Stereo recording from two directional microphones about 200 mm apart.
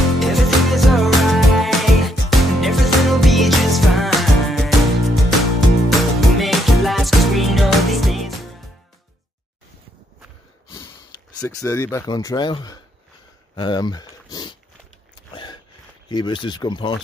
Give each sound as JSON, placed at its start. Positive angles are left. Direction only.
{"t": 0.2, "sound": "music", "side_deg": 0}
{"t": 11.4, "sound": "speech", "side_deg": 15}
{"t": 16.1, "sound": "speech", "side_deg": 20}